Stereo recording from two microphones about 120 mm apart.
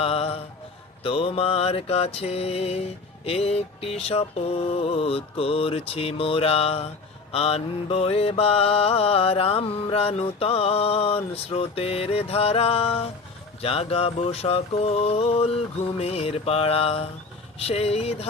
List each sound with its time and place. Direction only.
0.0 s music: 55° left (ahead or behind)
1.0 s mantra: 55° left (ahead or behind)